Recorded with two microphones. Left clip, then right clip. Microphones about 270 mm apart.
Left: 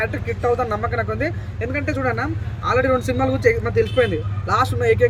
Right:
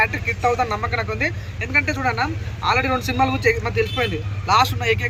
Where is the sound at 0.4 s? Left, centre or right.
Centre.